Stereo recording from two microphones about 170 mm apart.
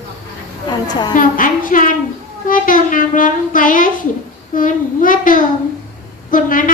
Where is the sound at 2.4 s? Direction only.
55° left (ahead or behind).